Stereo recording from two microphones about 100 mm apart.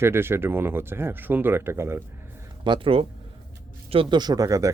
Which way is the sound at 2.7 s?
60° right (ahead or behind).